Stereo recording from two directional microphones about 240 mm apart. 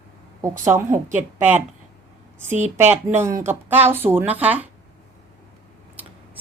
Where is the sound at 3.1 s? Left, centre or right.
Centre.